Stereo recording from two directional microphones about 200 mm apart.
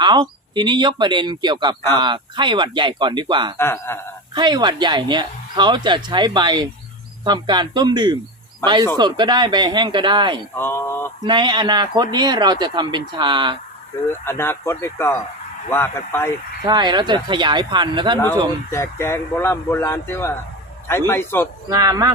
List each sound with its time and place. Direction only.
0.0 s speech: 20° right (ahead or behind)
3.6 s speech: 10° left (ahead or behind)
4.4 s speech: 20° right (ahead or behind)
10.5 s speech: 10° left (ahead or behind)
11.2 s speech: 20° right (ahead or behind)
14.3 s speech: 10° left (ahead or behind)
16.6 s speech: 20° right (ahead or behind)
18.7 s speech: 15° left (ahead or behind)
21.7 s speech: 15° right (ahead or behind)